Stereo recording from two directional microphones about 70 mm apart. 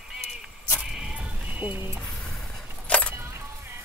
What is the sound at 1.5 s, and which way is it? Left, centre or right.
Speech, right.